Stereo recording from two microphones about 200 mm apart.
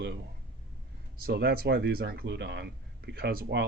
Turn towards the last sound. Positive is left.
turn(degrees=-50)  # may be behind; listen again after turning